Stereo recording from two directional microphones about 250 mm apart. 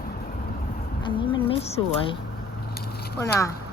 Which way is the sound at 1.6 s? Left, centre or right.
Left.